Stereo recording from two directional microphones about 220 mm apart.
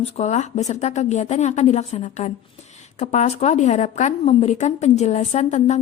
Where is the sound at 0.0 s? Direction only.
30° left (ahead or behind).